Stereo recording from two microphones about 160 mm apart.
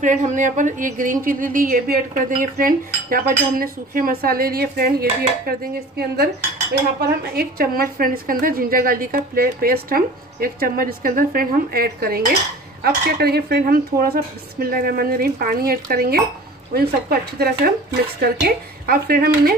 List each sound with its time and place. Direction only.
0.0 s a woman's voice: 50° right (ahead or behind); by 4.9 s 70° right (ahead or behind)
5.9 s cutlery: 80° right
7.3 s a woman's voice: 70° right (ahead or behind)
12.8 s speech: 85° right